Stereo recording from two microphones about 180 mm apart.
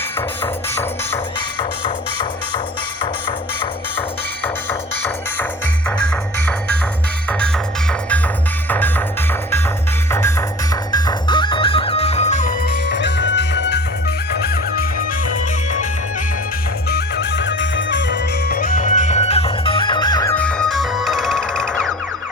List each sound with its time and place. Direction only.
4.4 s music: 10° left (ahead or behind)
7.3 s music: 5° left (ahead or behind)
10.1 s music: 15° left (ahead or behind)
10.9 s music: 25° left (ahead or behind); by 12.5 s 40° left (ahead or behind)
12.9 s music: 80° left
14.4 s music: 60° left (ahead or behind)
16.9 s music: 75° left (ahead or behind); by 20.3 s 20° left (ahead or behind)
20.3 s music: 5° left (ahead or behind)